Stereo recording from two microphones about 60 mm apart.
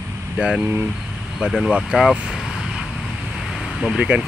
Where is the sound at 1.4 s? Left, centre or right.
Centre.